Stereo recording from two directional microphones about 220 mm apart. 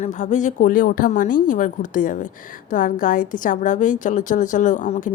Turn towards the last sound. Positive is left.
turn(degrees=35)  # may be behind; listen again after turning